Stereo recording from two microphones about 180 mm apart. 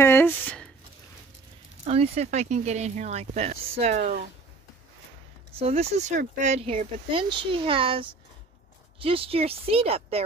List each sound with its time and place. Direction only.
0.0 s a sound: 10° left (ahead or behind)
1.9 s speech: 35° right (ahead or behind)
4.0 s speech: 55° right (ahead or behind)
5.6 s speech: 35° right (ahead or behind)